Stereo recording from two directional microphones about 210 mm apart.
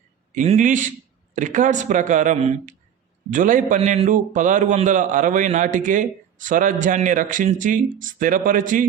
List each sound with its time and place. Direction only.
0.3 s a man's voice: 35° right (ahead or behind)